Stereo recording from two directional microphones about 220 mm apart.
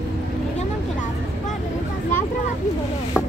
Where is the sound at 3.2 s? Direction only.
10° left (ahead or behind).